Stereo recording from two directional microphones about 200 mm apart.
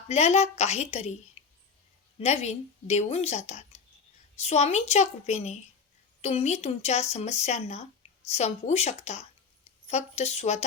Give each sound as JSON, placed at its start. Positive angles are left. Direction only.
{"t": 0.1, "sound": "speech", "side_deg": 35}
{"t": 2.2, "sound": "speech", "side_deg": 35}